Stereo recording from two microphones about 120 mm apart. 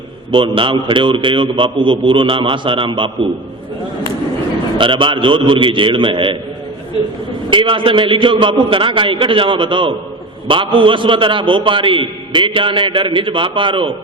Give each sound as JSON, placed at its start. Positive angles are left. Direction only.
{"t": 0.3, "sound": "a man's voice", "side_deg": -45}
{"t": 4.8, "sound": "a man's voice", "side_deg": -45}
{"t": 7.5, "sound": "a man's voice", "side_deg": -45}